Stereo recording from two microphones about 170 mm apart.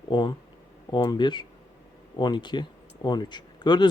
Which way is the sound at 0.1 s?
25° left (ahead or behind).